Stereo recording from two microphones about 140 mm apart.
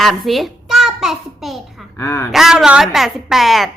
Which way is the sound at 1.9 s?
20° left (ahead or behind).